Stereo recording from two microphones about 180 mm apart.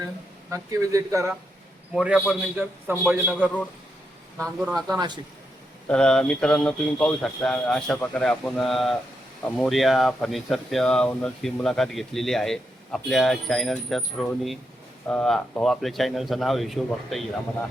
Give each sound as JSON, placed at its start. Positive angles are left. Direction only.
{"t": 0.5, "sound": "speech", "side_deg": -20}
{"t": 1.9, "sound": "a man's voice", "side_deg": -5}
{"t": 4.9, "sound": "speech", "side_deg": -25}
{"t": 5.9, "sound": "speech", "side_deg": 5}